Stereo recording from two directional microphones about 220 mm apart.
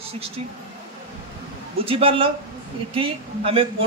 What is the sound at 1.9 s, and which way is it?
A woman's voice, 25° right (ahead or behind).